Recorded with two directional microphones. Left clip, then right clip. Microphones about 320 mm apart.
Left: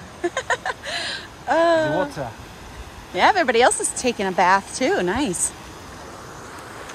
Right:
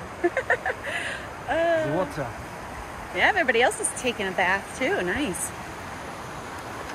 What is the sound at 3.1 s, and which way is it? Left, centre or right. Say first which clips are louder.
Speech: left 4 dB; centre.